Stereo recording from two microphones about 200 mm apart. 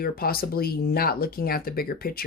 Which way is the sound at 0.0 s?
50° left (ahead or behind).